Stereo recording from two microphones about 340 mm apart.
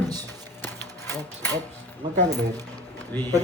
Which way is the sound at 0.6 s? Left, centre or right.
Centre.